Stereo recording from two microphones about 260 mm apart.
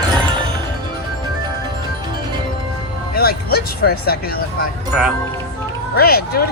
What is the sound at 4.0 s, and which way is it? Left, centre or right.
Speech, left.